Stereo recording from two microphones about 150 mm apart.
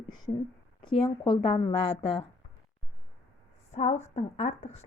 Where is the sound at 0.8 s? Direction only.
35° left (ahead or behind).